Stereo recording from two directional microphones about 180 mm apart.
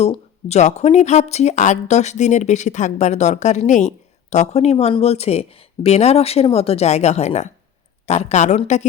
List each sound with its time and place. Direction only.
0.4 s speech: 40° left (ahead or behind)